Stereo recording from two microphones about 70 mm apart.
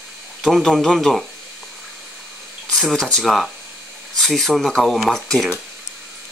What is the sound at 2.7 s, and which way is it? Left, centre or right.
Speech, centre.